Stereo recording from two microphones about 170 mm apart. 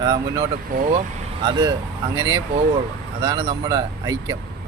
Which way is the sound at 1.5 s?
20° right (ahead or behind).